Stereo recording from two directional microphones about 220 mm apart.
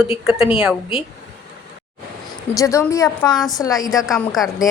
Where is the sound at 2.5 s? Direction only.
15° left (ahead or behind).